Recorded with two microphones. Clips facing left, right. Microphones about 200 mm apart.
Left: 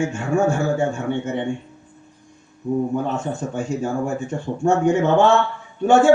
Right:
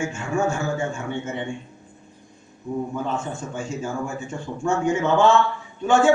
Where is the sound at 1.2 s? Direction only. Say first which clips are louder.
Left 5 dB; 55° left (ahead or behind).